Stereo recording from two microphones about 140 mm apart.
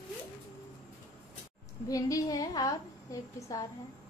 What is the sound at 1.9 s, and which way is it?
A woman's voice, 25° left (ahead or behind).